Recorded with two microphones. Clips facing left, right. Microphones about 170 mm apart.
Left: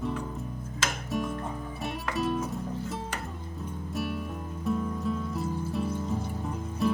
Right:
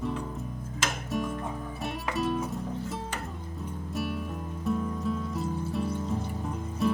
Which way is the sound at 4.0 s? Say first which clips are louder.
Even; centre (ahead or behind).